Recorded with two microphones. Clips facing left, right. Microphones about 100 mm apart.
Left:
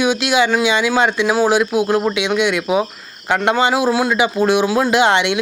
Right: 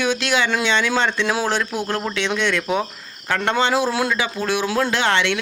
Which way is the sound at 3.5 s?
10° left (ahead or behind).